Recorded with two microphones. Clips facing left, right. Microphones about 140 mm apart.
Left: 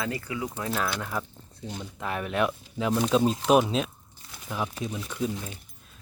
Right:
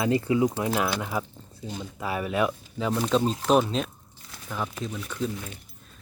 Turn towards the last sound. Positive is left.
turn(degrees=15)  # may be behind; listen again after turning